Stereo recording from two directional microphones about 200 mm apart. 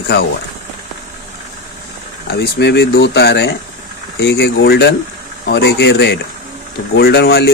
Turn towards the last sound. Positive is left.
turn(degrees=55)  # may be behind; listen again after turning